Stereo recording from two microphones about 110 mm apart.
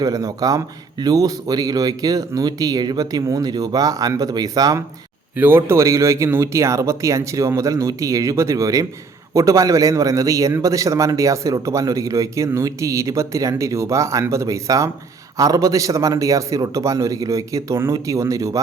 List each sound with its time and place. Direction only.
0.0 s speech: 35° right (ahead or behind)
5.4 s a man's voice: 20° right (ahead or behind)